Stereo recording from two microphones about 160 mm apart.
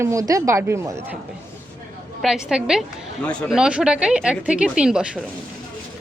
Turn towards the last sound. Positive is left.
turn(degrees=-5)  # may be behind; listen again after turning